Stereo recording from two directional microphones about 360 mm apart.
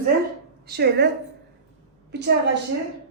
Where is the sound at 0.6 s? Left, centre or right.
Right.